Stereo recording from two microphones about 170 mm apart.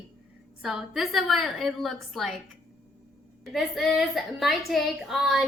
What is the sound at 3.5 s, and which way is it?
A woman's voice, centre (ahead or behind).